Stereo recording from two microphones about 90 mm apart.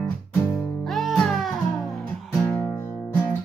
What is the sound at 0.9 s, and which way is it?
Music, centre (ahead or behind).